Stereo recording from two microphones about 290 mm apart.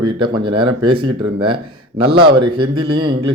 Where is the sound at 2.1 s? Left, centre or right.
Centre.